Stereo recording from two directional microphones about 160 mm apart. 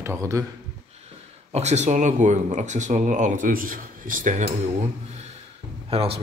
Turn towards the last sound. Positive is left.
turn(degrees=-35)  # may be behind; listen again after turning